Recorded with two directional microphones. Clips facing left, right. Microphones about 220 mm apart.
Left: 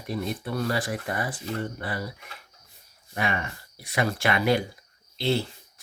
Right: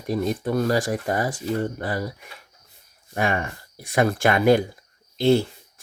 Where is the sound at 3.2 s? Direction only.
45° right (ahead or behind).